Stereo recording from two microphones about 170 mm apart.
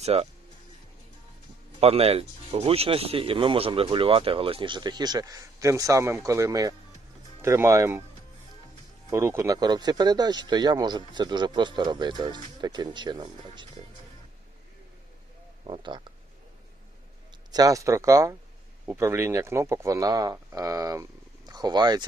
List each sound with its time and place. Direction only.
0.0 s speech: 35° right (ahead or behind)
1.8 s speech: 35° right (ahead or behind); by 8.0 s 15° right (ahead or behind)
9.0 s speech: 15° right (ahead or behind)
15.6 s speech: 30° right (ahead or behind)
17.5 s speech: 20° right (ahead or behind)